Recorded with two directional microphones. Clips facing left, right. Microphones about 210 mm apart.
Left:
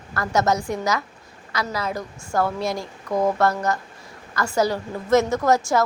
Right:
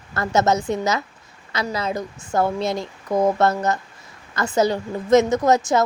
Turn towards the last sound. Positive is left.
turn(degrees=-20)  # may be behind; listen again after turning